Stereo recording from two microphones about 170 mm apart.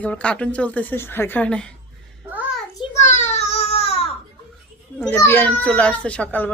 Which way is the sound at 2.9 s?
45° left (ahead or behind).